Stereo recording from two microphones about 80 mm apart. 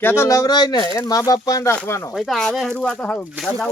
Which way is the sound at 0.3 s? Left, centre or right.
Left.